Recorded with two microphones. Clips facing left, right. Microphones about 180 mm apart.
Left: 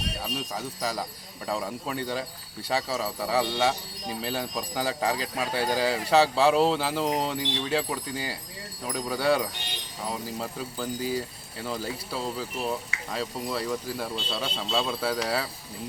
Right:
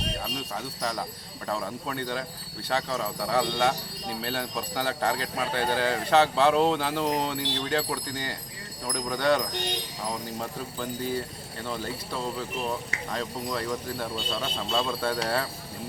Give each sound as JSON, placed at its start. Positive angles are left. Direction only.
{"t": 0.5, "sound": "speech", "side_deg": 5}